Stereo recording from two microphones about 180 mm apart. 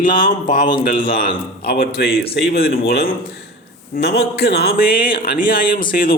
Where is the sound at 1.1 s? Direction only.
50° left (ahead or behind).